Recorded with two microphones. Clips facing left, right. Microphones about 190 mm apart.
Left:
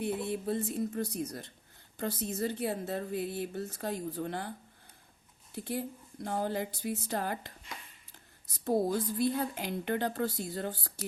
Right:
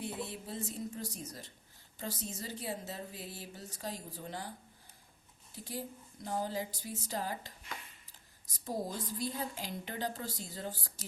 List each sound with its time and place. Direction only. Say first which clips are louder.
0.0 s a woman's voice: left 8 dB; 60° left (ahead or behind)
5.5 s a woman's voice: left 6 dB; 60° left (ahead or behind)